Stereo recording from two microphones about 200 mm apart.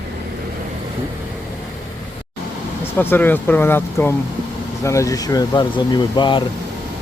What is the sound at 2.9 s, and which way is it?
Speech, 10° left (ahead or behind).